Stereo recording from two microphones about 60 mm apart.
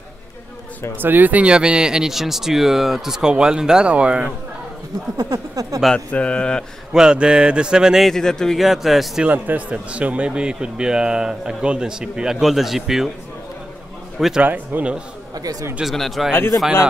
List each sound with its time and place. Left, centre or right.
0.9 s a man's voice: right
5.1 s a sound: right
5.9 s speech: centre
6.9 s a man's voice: centre
8.0 s speech: centre
8.5 s speech: centre
9.3 s a man's voice: right; by 13.1 s centre
14.4 s speech: right
15.8 s speech: centre
16.3 s speech: left